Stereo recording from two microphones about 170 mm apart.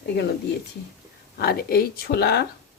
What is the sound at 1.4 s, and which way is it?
Speech, 60° left (ahead or behind).